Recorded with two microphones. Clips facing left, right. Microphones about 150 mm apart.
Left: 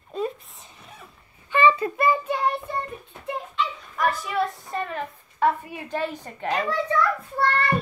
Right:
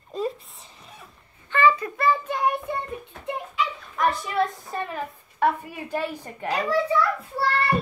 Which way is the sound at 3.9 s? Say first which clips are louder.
Right 1 dB; centre (ahead or behind).